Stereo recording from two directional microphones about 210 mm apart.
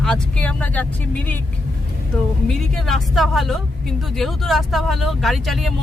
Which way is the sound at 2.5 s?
Centre (ahead or behind).